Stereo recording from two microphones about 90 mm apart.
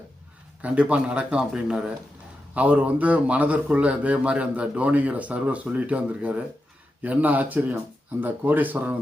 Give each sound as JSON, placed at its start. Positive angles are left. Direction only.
{"t": 0.6, "sound": "a man's voice", "side_deg": -15}